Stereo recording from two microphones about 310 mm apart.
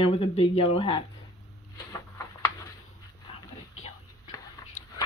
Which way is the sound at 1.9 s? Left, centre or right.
Centre.